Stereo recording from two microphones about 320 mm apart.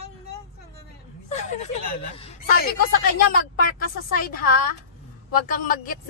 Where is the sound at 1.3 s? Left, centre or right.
Left.